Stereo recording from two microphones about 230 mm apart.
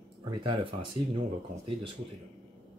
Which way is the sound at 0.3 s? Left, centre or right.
Right.